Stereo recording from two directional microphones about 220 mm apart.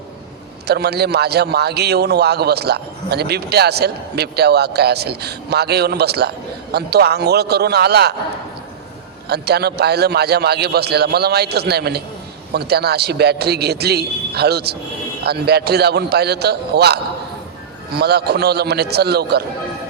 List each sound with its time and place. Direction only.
0.7 s a man's voice: 45° right (ahead or behind)
9.3 s a man's voice: 45° right (ahead or behind)